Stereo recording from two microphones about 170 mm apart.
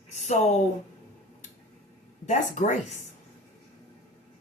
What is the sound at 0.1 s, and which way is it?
Speech, 45° left (ahead or behind).